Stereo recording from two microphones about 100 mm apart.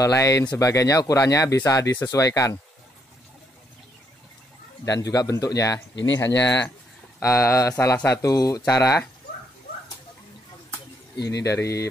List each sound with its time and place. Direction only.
0.0 s speech: 35° left (ahead or behind)
4.8 s speech: 35° left (ahead or behind)
11.4 s speech: 30° left (ahead or behind)